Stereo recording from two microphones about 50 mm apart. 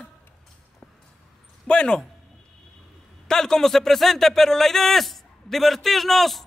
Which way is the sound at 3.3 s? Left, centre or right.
Centre.